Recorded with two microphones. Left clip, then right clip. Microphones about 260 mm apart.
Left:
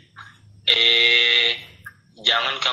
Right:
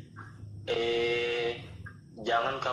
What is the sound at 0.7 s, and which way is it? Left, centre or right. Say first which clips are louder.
Fire alarm: left 13 dB; centre.